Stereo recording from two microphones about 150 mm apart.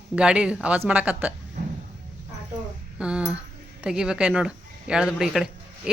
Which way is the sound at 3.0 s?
5° right (ahead or behind).